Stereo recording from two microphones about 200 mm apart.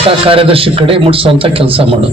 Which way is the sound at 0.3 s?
30° right (ahead or behind).